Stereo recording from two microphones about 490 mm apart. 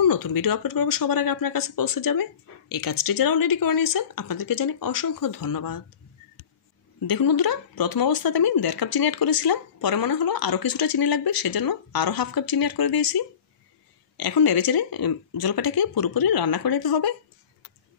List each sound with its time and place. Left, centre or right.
0.0 s speech: left
7.1 s speech: left